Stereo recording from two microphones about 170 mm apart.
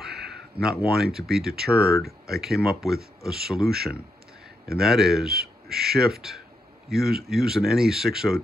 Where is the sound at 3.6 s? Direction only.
65° right (ahead or behind).